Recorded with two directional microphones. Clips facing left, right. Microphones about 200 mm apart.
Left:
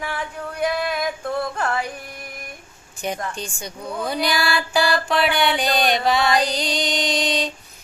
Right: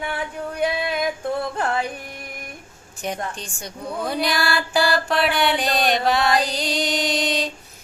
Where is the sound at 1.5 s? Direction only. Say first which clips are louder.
Right 1 dB; 30° right (ahead or behind).